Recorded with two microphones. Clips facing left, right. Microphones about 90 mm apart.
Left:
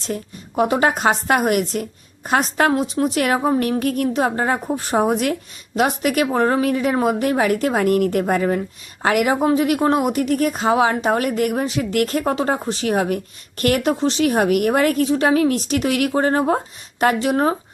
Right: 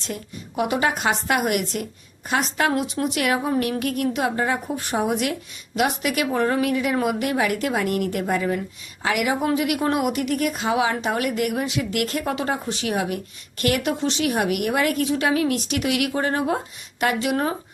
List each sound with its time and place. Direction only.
0.0 s a woman's voice: 40° left (ahead or behind)